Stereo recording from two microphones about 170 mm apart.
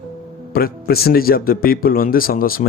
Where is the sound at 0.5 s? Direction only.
60° left (ahead or behind).